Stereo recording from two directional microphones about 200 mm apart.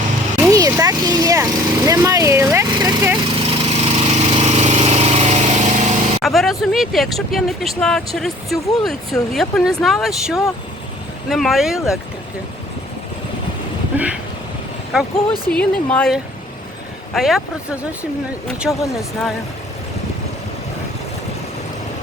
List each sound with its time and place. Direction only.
0.4 s vehicle: 15° right (ahead or behind)
3.3 s lawn mower: 30° right (ahead or behind)
6.2 s speech: centre (ahead or behind)
13.9 s a sound: 5° right (ahead or behind)
14.9 s speech: 5° right (ahead or behind)